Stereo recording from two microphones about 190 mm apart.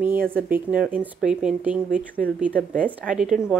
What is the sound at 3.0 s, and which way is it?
Speech, 5° right (ahead or behind).